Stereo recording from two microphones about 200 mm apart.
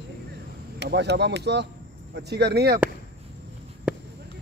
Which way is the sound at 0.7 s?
55° right (ahead or behind).